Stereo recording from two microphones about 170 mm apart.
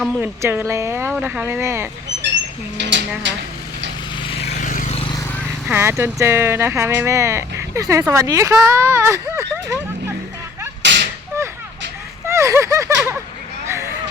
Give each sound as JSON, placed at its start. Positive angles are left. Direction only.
{"t": 0.2, "sound": "speech", "side_deg": -15}
{"t": 2.7, "sound": "speech", "side_deg": -90}
{"t": 4.2, "sound": "vehicle", "side_deg": 35}
{"t": 4.9, "sound": "vehicle", "side_deg": 30}
{"t": 5.6, "sound": "speech", "side_deg": -15}
{"t": 10.8, "sound": "whip", "side_deg": -90}
{"t": 12.2, "sound": "a sound", "side_deg": -15}